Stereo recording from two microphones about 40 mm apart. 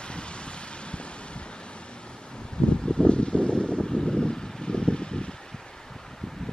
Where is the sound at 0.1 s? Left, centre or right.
Left.